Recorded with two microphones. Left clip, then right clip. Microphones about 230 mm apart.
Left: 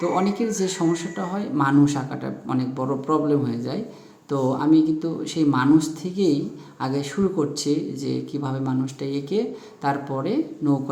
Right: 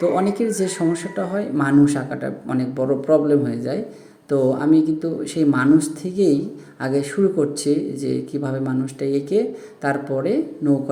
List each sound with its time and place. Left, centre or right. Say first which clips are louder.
0.0 s speech: right 4 dB; centre